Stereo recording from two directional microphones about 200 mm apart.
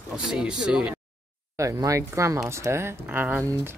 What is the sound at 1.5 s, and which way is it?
Speech, 15° right (ahead or behind).